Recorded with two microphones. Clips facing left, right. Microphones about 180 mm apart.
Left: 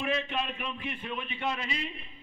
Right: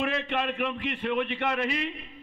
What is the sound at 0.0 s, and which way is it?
A man's voice, 70° right (ahead or behind).